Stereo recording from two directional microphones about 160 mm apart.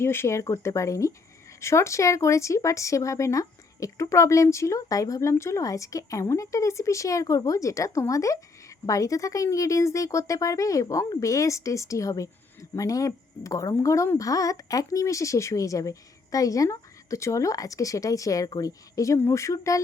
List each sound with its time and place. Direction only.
0.0 s speech: 15° left (ahead or behind)